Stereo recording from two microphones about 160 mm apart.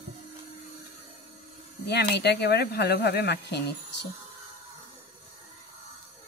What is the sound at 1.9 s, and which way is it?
Speech, 90° left.